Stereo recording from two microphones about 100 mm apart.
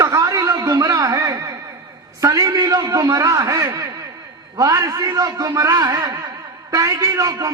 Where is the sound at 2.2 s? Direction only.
35° right (ahead or behind).